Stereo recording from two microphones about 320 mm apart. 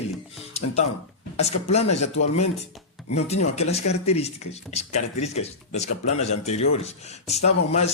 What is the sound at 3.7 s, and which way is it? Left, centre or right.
Speech, centre.